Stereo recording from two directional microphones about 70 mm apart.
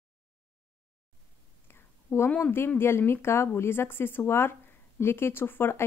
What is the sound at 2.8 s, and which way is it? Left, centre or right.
A woman's voice, left.